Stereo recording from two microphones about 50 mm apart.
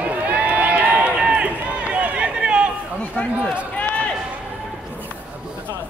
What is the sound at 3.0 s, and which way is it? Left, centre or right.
Speech, left.